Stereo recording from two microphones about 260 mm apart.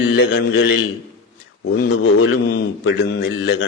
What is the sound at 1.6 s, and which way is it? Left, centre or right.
Mantra, left.